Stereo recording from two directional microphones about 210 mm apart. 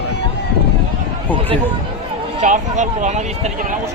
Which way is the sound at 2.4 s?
35° right (ahead or behind).